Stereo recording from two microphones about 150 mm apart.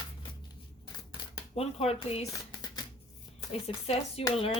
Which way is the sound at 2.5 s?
25° left (ahead or behind).